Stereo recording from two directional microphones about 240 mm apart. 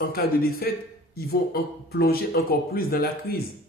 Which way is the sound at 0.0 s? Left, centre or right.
Left.